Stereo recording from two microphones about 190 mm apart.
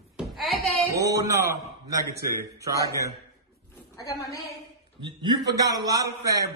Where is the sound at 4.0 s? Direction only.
20° left (ahead or behind).